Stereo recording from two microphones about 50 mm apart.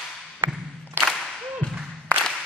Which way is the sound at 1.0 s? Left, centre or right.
Right.